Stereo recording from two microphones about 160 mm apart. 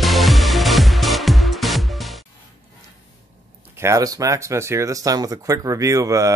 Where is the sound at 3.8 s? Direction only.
20° right (ahead or behind).